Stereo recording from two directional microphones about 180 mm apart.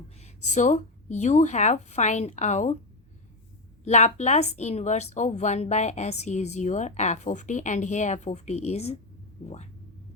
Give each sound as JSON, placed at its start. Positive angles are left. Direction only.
{"t": 0.2, "sound": "speech", "side_deg": 40}
{"t": 3.8, "sound": "speech", "side_deg": 40}